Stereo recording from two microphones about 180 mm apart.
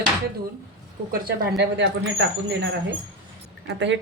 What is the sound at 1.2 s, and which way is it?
Speech, 75° right (ahead or behind).